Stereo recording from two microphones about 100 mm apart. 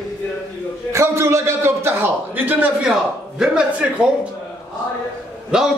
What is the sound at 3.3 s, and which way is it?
Speech, 10° right (ahead or behind).